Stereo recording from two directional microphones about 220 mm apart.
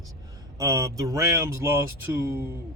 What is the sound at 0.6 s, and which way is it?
Speech, 15° right (ahead or behind).